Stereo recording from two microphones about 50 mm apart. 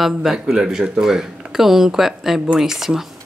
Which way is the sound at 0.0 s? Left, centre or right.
Centre.